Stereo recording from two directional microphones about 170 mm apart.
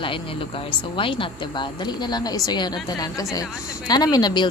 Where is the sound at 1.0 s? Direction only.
30° left (ahead or behind).